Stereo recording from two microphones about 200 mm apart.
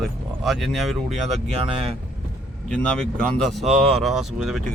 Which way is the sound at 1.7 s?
25° right (ahead or behind).